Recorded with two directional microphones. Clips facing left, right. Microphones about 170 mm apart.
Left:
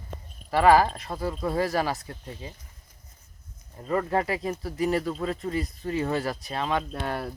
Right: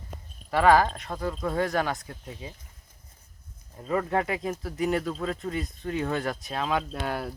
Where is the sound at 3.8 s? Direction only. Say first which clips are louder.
Left 1 dB; centre (ahead or behind).